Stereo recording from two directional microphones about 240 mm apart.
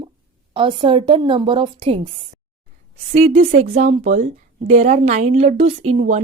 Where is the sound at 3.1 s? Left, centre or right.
Right.